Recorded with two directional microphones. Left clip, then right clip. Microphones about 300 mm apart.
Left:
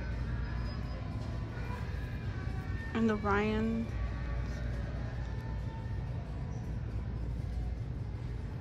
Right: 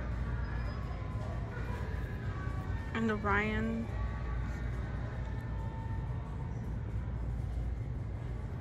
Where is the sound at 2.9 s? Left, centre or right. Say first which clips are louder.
Left 1 dB; centre.